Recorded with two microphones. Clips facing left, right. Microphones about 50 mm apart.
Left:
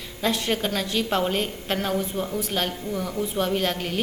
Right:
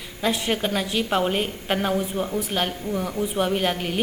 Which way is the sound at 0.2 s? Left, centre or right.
Centre.